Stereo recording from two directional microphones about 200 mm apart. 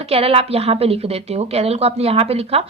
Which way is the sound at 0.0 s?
30° right (ahead or behind).